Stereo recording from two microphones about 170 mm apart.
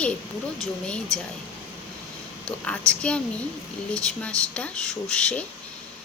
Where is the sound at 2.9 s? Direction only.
5° left (ahead or behind).